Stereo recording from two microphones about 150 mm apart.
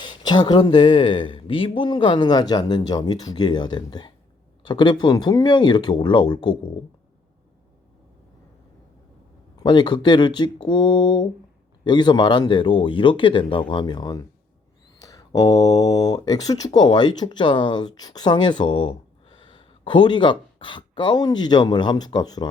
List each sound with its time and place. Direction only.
0.0 s speech: 30° left (ahead or behind)
9.6 s speech: 30° left (ahead or behind)